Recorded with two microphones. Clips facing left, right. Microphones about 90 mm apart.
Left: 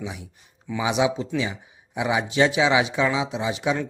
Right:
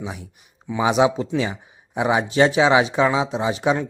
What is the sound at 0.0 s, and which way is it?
Speech, 40° right (ahead or behind).